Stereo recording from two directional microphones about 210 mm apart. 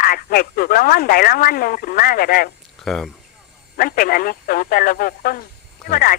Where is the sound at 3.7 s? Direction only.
45° left (ahead or behind).